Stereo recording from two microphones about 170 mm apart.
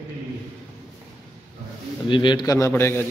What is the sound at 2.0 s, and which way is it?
A man's voice, 30° left (ahead or behind).